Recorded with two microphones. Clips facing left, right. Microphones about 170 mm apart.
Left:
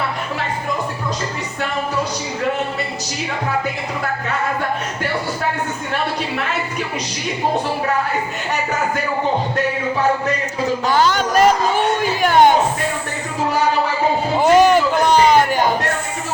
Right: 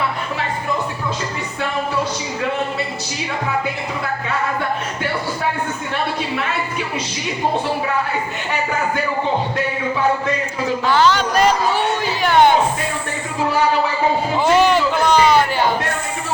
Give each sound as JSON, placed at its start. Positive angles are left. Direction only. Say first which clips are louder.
{"t": 10.8, "sound": "a man's voice", "louder": "right 2 dB", "side_deg": 40}
{"t": 12.2, "sound": "music", "louder": "left 1 dB", "side_deg": 45}
{"t": 14.3, "sound": "a sound", "louder": "left 4 dB", "side_deg": 45}